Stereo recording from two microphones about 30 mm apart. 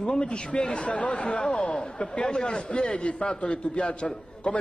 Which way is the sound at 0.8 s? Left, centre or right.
Left.